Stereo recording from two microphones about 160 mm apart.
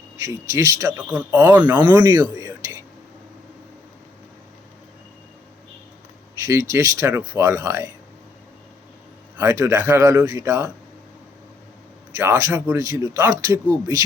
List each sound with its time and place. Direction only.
0.2 s speech: 20° right (ahead or behind)
2.5 s a sound: 20° right (ahead or behind)
6.3 s speech: 20° right (ahead or behind)
9.4 s speech: 20° right (ahead or behind)
12.1 s speech: 15° right (ahead or behind)